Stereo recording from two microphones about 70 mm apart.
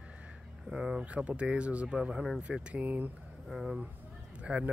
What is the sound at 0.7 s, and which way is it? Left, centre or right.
Speech, centre.